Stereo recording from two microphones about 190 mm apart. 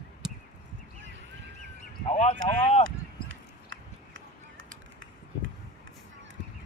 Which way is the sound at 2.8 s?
90° right.